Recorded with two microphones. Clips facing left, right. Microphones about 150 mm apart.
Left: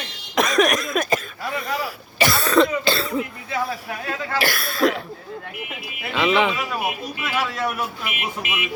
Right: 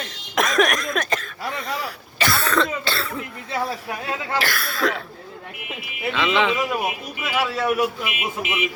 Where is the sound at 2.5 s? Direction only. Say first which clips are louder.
Left 5 dB; 15° left (ahead or behind).